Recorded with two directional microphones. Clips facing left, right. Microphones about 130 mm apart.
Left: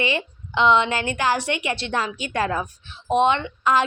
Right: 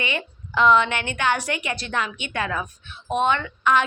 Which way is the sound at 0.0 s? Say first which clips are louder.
Left 4 dB; 30° left (ahead or behind).